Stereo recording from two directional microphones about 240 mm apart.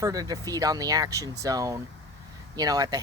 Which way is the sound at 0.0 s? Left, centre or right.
Centre.